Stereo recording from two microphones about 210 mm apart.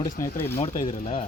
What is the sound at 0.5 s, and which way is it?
Speech, 30° left (ahead or behind).